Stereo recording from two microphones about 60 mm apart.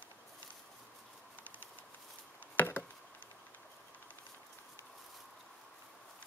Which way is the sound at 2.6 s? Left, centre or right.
Left.